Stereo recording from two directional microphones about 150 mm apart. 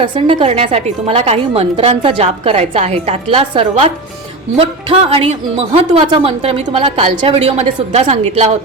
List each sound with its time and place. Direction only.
0.0 s a woman's voice: 35° right (ahead or behind)